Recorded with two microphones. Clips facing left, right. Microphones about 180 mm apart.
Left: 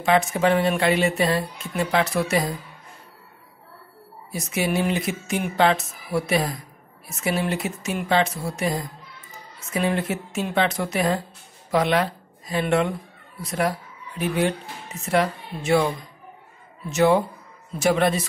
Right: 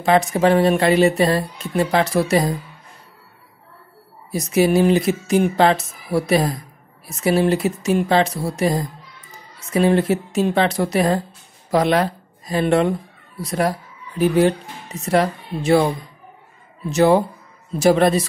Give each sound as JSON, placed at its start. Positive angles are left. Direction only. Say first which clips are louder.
{"t": 0.0, "sound": "speech", "louder": "right 4 dB", "side_deg": -35}
{"t": 4.3, "sound": "speech", "louder": "right 8 dB", "side_deg": -35}
{"t": 16.9, "sound": "speech", "louder": "right 4 dB", "side_deg": -35}